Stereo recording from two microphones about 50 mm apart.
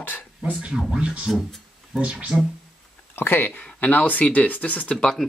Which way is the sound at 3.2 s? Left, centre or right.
Left.